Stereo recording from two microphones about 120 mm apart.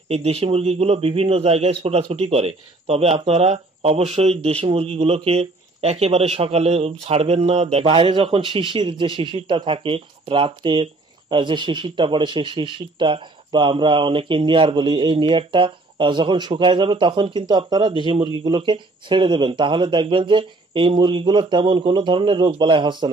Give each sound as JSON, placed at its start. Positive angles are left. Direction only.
{"t": 0.1, "sound": "a man's voice", "side_deg": -60}